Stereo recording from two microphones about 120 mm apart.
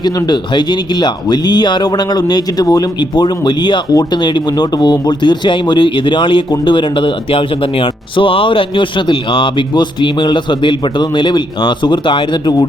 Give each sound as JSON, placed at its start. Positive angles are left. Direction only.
{"t": 0.0, "sound": "speech", "side_deg": 35}